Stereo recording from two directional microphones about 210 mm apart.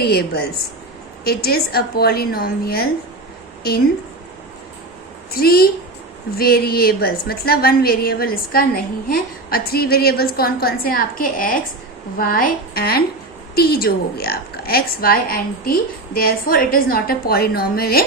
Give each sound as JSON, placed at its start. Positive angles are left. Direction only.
{"t": 0.0, "sound": "a woman's voice", "side_deg": 50}
{"t": 5.3, "sound": "a woman's voice", "side_deg": 45}